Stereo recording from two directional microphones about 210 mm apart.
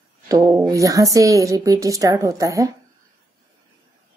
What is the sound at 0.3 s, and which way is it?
A woman's voice, 15° right (ahead or behind).